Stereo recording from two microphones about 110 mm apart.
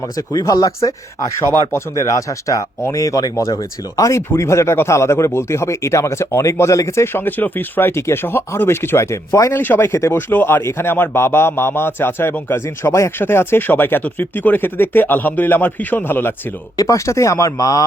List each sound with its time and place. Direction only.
0.2 s speech: 30° left (ahead or behind)
1.7 s speech: 30° left (ahead or behind)
16.7 s speech: 30° left (ahead or behind)